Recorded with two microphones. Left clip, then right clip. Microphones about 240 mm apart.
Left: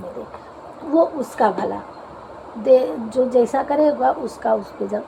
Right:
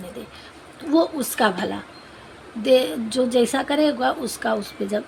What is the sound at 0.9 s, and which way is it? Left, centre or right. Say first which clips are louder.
Speech: left 3 dB; right.